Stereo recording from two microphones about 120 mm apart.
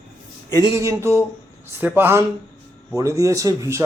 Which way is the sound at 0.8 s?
25° right (ahead or behind).